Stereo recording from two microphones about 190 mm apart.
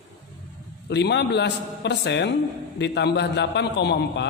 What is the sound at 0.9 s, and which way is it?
A man's voice, 65° left (ahead or behind).